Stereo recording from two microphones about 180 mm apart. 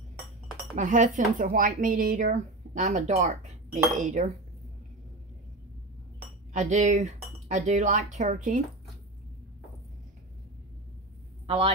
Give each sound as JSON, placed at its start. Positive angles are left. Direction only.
{"t": 0.7, "sound": "speech", "side_deg": -45}
{"t": 6.5, "sound": "speech", "side_deg": -40}
{"t": 11.4, "sound": "a man's voice", "side_deg": -30}